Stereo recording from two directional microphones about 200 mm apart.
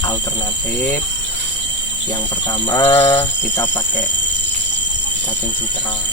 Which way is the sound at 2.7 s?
10° left (ahead or behind).